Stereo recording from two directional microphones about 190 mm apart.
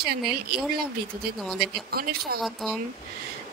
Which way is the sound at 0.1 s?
55° right (ahead or behind).